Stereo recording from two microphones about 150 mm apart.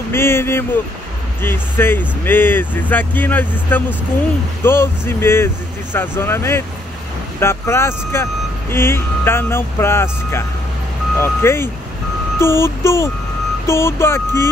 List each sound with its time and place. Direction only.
0.1 s speech: 15° left (ahead or behind)